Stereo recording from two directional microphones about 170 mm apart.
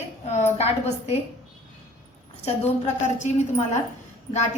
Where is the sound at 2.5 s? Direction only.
40° left (ahead or behind).